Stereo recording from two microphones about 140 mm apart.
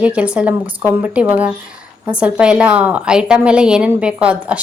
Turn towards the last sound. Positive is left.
turn(degrees=-10)  # may be behind; listen again after turning